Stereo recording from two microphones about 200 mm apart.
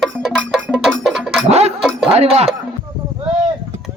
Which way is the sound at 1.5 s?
30° right (ahead or behind).